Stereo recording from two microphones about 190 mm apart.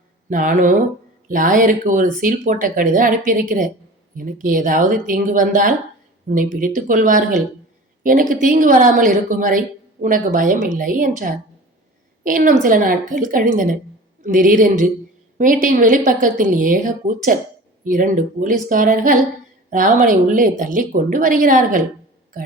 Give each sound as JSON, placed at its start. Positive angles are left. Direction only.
{"t": 0.3, "sound": "a woman's voice", "side_deg": -45}